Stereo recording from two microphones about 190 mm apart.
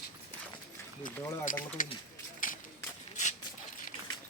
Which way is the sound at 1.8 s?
45° left (ahead or behind).